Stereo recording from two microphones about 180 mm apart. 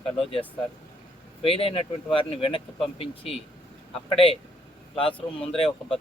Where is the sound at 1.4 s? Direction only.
30° left (ahead or behind).